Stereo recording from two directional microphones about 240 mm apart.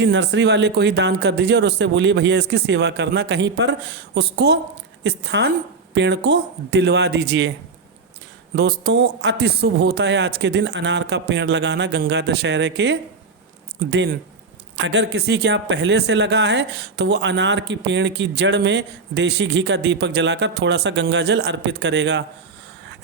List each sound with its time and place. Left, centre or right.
0.0 s speech: right
8.5 s speech: right